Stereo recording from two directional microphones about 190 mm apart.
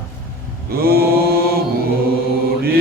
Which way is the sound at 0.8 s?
55° right (ahead or behind).